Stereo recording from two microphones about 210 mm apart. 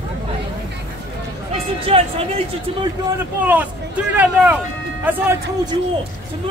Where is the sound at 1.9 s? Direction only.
25° right (ahead or behind).